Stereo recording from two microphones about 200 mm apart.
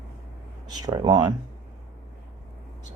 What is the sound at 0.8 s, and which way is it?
Speech, 20° right (ahead or behind).